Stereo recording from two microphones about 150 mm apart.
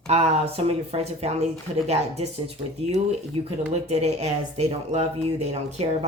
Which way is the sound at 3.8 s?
45° right (ahead or behind).